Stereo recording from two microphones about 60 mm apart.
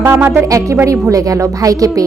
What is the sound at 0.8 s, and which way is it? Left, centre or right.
Speech, right.